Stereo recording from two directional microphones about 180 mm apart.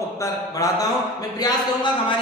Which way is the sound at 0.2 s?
20° left (ahead or behind).